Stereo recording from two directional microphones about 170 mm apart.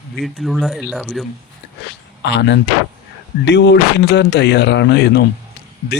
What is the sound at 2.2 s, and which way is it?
Speech, 90° left.